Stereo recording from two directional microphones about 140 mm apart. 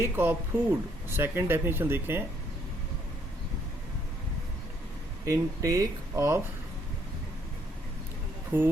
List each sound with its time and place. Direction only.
0.0 s speech: 15° right (ahead or behind)
5.2 s speech: 25° right (ahead or behind)
8.5 s speech: 15° right (ahead or behind)